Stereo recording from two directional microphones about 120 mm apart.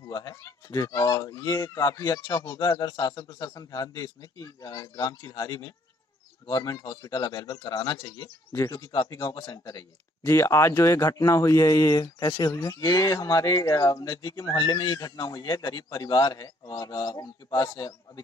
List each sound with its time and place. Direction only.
0.0 s speech: 30° left (ahead or behind)
8.5 s speech: 25° left (ahead or behind)
8.8 s speech: 40° left (ahead or behind)